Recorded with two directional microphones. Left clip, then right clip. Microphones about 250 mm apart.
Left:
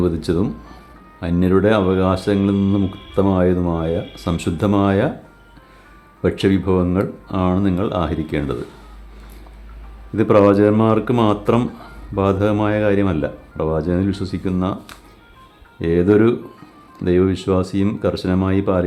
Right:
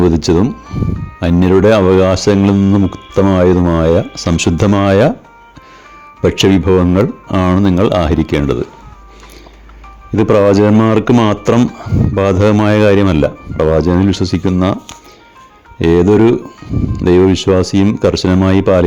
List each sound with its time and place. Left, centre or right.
0.0 s speech: right
6.2 s speech: right
10.2 s speech: right
15.8 s speech: right